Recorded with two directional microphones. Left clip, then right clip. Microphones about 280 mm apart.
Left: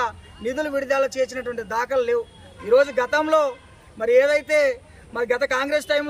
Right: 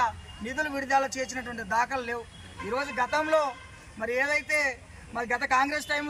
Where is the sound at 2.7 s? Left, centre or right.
Left.